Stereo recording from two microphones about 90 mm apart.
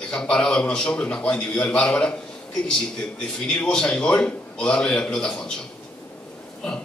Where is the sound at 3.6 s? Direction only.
10° left (ahead or behind).